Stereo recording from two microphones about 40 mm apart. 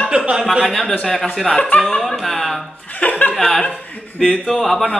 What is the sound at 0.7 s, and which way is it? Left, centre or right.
Speech, centre.